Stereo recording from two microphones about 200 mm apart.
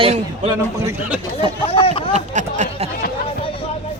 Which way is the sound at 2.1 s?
35° right (ahead or behind).